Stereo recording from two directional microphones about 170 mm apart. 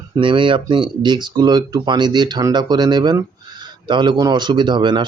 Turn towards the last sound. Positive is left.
turn(degrees=-25)  # may be behind; listen again after turning